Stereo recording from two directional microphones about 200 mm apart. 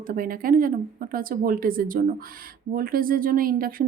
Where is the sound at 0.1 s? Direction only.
45° right (ahead or behind).